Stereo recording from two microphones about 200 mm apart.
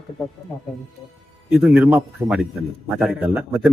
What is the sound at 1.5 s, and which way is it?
A man's voice, 5° right (ahead or behind).